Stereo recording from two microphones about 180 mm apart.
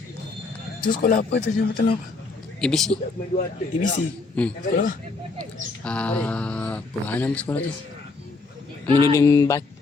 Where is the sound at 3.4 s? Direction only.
45° left (ahead or behind).